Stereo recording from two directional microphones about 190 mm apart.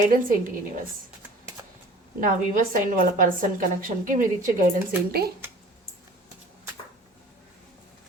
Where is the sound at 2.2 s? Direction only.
45° right (ahead or behind).